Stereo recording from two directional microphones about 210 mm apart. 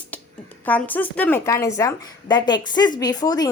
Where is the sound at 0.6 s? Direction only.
10° left (ahead or behind).